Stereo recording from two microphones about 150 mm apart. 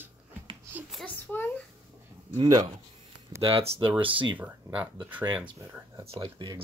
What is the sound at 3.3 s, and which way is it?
Speech, 40° right (ahead or behind).